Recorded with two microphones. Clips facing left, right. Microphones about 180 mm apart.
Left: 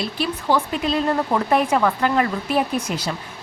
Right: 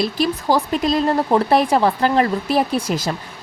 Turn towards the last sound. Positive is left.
turn(degrees=-35)  # may be behind; listen again after turning